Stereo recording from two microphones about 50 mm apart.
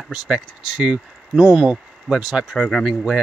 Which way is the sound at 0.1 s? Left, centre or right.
Centre.